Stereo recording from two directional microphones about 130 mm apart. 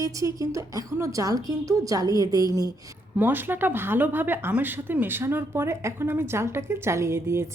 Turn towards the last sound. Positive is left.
turn(degrees=-20)  # may be behind; listen again after turning